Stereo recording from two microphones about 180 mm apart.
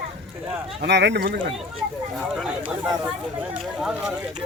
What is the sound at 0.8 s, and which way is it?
Speech, 75° right (ahead or behind).